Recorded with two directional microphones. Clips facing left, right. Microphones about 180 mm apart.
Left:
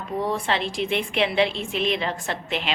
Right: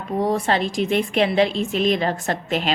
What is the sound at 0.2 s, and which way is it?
A woman's voice, 40° right (ahead or behind).